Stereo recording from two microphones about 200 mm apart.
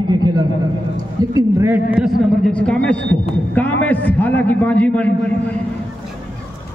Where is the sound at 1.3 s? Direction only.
10° right (ahead or behind).